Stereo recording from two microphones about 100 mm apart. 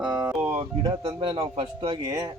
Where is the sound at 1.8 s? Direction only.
45° right (ahead or behind).